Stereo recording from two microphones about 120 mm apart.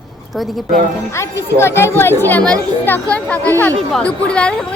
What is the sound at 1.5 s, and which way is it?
Speech, 20° left (ahead or behind).